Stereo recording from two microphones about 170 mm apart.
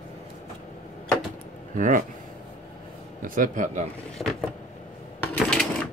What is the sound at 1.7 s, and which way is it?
Speech, 50° right (ahead or behind).